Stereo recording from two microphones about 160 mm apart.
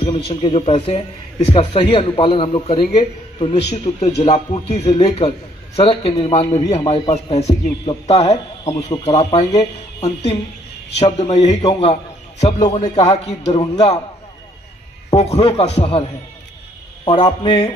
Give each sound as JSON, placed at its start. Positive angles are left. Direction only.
{"t": 0.0, "sound": "a man's voice", "side_deg": 35}
{"t": 4.3, "sound": "a man's voice", "side_deg": 30}
{"t": 8.6, "sound": "speech", "side_deg": 25}
{"t": 9.1, "sound": "a man's voice", "side_deg": 40}
{"t": 11.0, "sound": "a man's voice", "side_deg": 40}
{"t": 15.1, "sound": "a man's voice", "side_deg": 40}